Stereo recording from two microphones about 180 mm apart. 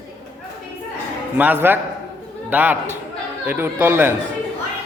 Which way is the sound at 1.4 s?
10° right (ahead or behind).